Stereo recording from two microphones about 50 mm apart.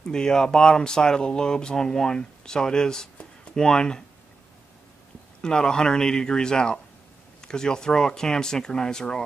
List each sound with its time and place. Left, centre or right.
0.0 s speech: centre
5.4 s speech: centre